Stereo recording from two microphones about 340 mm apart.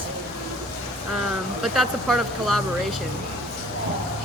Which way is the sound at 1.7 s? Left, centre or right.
Centre.